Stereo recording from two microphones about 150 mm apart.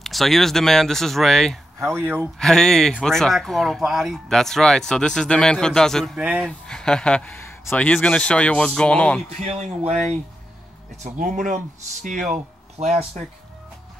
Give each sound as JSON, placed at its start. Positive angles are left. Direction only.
{"t": 0.0, "sound": "speech", "side_deg": 0}
{"t": 1.8, "sound": "speech", "side_deg": -15}
{"t": 2.3, "sound": "speech", "side_deg": 0}
{"t": 6.1, "sound": "speech", "side_deg": -10}
{"t": 6.7, "sound": "speech", "side_deg": 5}
{"t": 11.1, "sound": "speech", "side_deg": -60}
{"t": 12.3, "sound": "speech", "side_deg": -50}